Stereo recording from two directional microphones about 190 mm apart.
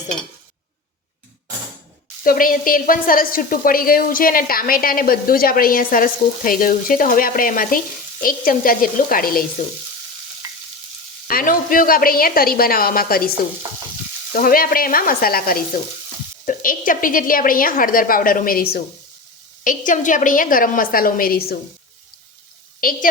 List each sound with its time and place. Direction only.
2.2 s a woman's voice: 50° left (ahead or behind)
10.4 s frying: 20° right (ahead or behind)
11.3 s a woman's voice: 50° left (ahead or behind)
14.3 s a woman's voice: 50° left (ahead or behind)
22.8 s a woman's voice: 45° left (ahead or behind)